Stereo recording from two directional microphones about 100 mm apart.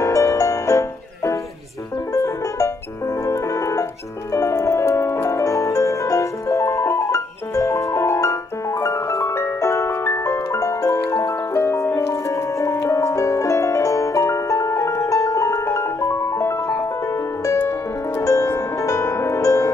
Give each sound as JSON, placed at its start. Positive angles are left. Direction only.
{"t": 0.0, "sound": "music", "side_deg": 30}
{"t": 17.6, "sound": "music", "side_deg": 30}